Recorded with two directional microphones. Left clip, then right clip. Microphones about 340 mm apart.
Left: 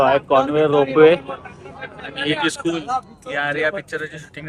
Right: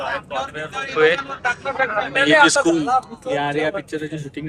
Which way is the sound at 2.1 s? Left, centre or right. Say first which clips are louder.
Right 8 dB; right.